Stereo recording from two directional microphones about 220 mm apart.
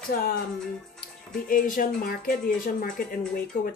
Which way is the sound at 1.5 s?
40° left (ahead or behind).